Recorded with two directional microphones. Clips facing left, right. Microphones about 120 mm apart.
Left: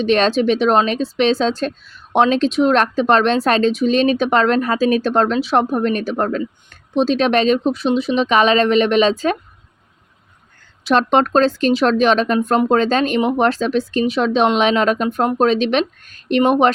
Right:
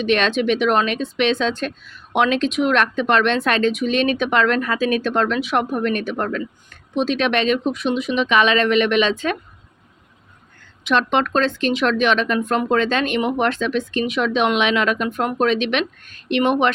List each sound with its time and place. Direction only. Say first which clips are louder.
0.0 s speech: left 3 dB; 35° left (ahead or behind)
10.8 s speech: left 4 dB; 35° left (ahead or behind)